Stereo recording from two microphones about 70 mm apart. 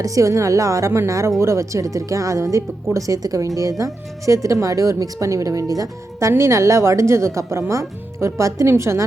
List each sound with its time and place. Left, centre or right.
0.0 s a woman's voice: right